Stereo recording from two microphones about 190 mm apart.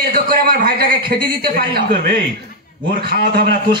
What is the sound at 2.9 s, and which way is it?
Speech, 50° right (ahead or behind).